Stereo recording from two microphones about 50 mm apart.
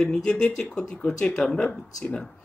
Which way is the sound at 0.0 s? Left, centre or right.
Centre.